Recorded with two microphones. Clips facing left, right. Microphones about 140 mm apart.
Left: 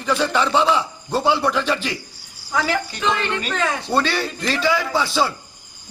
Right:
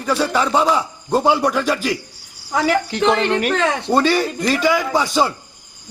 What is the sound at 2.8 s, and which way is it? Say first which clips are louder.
Speech: right 6 dB; 70° right (ahead or behind).